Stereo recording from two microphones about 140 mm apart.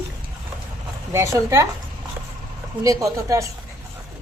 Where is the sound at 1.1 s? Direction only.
20° right (ahead or behind).